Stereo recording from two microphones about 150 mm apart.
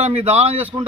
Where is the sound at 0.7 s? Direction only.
25° right (ahead or behind).